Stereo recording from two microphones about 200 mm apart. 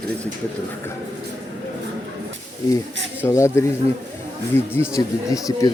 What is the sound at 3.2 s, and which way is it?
Speech, 15° left (ahead or behind).